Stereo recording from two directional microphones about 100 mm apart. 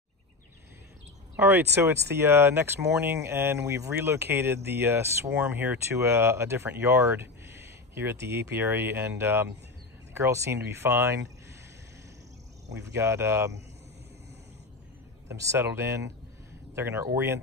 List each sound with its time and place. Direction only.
1.3 s speech: 20° right (ahead or behind)
12.7 s speech: 30° right (ahead or behind)
15.2 s speech: 30° right (ahead or behind)